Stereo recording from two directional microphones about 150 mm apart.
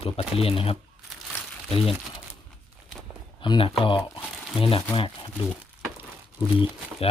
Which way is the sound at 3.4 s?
35° left (ahead or behind).